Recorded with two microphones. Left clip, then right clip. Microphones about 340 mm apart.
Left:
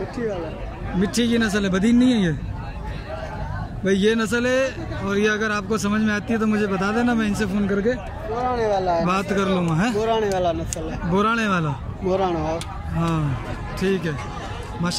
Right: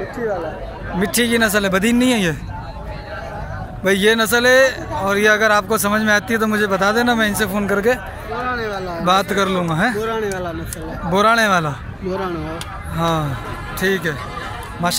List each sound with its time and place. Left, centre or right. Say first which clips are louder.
1.0 s speech: right 6 dB; centre
3.8 s speech: right 5 dB; centre
8.4 s speech: left 2 dB; left
9.0 s speech: right 6 dB; centre
9.9 s speech: left 1 dB; left
11.1 s speech: right 7 dB; centre
12.1 s speech: left 2 dB; left
13.7 s speech: right 5 dB; centre